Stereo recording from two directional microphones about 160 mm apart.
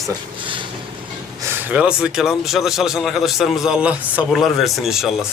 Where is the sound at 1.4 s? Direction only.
15° right (ahead or behind).